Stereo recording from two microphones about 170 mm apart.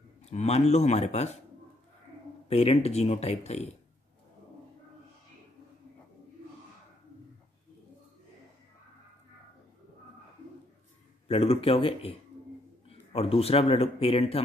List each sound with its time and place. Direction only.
0.2 s speech: 40° left (ahead or behind)
2.5 s speech: 40° left (ahead or behind)
11.2 s speech: 35° left (ahead or behind)
13.1 s speech: 35° left (ahead or behind)